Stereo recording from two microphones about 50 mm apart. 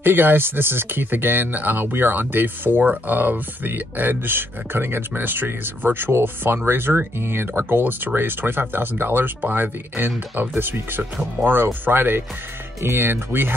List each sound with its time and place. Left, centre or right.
0.0 s speech: right